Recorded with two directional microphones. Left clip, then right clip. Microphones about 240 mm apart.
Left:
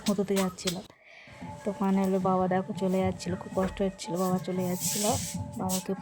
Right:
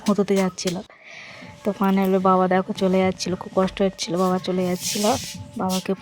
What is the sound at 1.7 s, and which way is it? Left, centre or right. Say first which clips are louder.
Speech: right 8 dB; centre.